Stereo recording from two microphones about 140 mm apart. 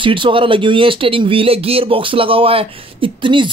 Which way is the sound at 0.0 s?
35° right (ahead or behind).